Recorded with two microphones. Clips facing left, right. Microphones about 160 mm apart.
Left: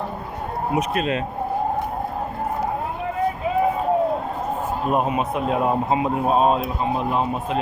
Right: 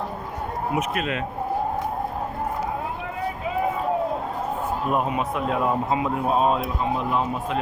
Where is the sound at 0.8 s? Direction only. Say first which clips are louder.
Left 5 dB; 30° left (ahead or behind).